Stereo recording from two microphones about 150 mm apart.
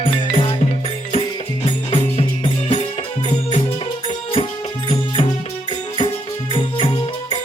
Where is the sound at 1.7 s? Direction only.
40° left (ahead or behind).